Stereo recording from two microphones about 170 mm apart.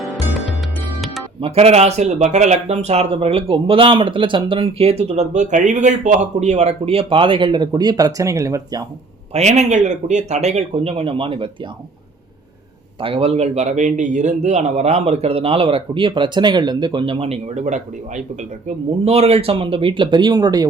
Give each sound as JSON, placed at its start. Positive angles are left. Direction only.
{"t": 1.4, "sound": "speech", "side_deg": -35}
{"t": 9.3, "sound": "speech", "side_deg": -40}
{"t": 13.0, "sound": "speech", "side_deg": -35}